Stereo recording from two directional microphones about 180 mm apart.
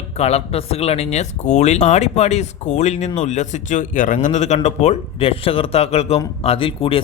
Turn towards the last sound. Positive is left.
turn(degrees=30)  # may be behind; listen again after turning